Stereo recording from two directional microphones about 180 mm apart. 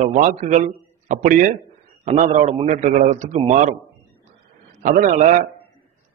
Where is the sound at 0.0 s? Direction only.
45° right (ahead or behind).